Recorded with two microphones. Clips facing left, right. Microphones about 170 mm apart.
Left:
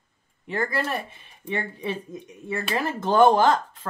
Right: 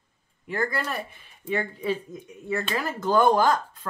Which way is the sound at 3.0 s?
25° left (ahead or behind).